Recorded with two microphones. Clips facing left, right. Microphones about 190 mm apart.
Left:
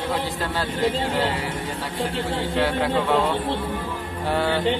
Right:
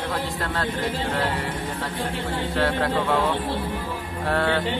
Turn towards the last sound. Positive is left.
turn(degrees=5)  # may be behind; listen again after turning